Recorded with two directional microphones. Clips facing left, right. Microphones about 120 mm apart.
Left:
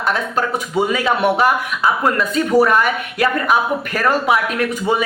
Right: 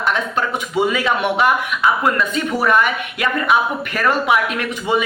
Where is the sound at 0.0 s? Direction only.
40° left (ahead or behind).